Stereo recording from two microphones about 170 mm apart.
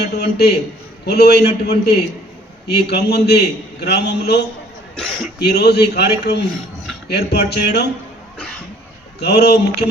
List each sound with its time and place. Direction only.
0.0 s a man's voice: 75° left (ahead or behind)
4.9 s speech: 5° left (ahead or behind)
5.4 s a man's voice: 80° left
9.2 s a man's voice: 75° left (ahead or behind)